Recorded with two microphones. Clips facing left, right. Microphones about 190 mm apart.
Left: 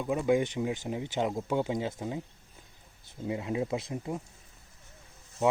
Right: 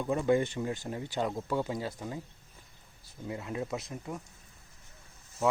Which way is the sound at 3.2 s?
15° left (ahead or behind).